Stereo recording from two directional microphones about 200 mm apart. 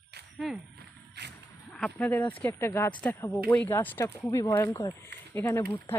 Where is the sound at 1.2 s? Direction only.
55° right (ahead or behind).